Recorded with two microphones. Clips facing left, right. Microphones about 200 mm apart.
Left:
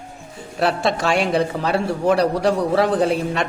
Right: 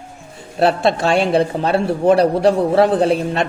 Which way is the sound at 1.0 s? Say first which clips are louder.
Right 3 dB; 30° right (ahead or behind).